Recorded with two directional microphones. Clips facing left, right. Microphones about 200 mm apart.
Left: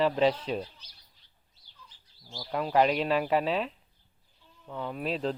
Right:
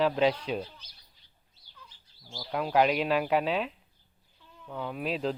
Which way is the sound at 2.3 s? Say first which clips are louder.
Even; centre (ahead or behind).